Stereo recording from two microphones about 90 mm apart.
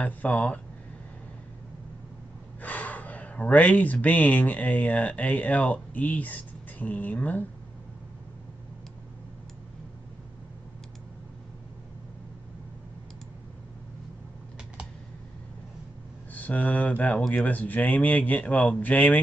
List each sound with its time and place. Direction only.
0.0 s speech: 15° left (ahead or behind)
2.6 s speech: 15° left (ahead or behind)
16.3 s speech: 20° left (ahead or behind)